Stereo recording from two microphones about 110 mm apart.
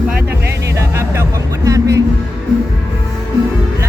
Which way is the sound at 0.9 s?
25° right (ahead or behind).